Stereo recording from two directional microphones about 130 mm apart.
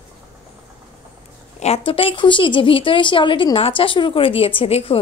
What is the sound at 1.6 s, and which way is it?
A woman's voice, 50° left (ahead or behind).